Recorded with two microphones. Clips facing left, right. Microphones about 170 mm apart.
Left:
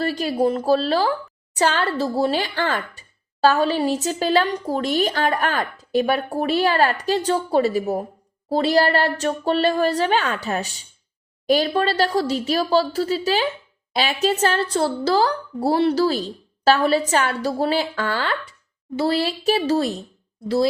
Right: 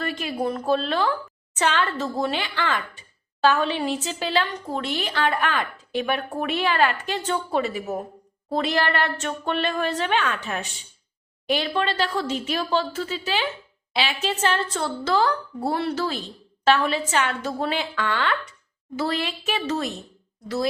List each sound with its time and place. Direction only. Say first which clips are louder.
0.0 s a woman's voice: left 6 dB; 35° left (ahead or behind)